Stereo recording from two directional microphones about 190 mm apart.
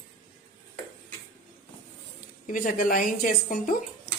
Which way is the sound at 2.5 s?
45° left (ahead or behind).